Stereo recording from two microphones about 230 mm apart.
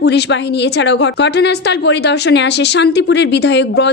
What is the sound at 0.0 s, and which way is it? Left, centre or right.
Speech, left.